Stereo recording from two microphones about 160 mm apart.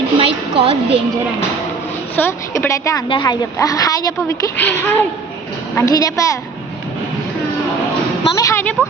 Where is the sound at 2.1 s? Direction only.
15° left (ahead or behind).